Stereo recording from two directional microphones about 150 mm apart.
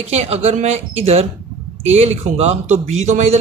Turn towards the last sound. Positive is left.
turn(degrees=-50)  # may be behind; listen again after turning